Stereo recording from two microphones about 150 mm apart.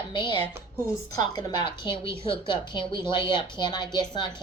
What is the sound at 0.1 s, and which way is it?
Speech, 35° left (ahead or behind).